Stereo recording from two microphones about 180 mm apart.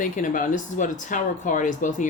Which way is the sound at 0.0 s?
45° left (ahead or behind).